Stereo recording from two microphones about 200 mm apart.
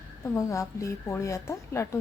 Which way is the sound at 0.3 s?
15° left (ahead or behind).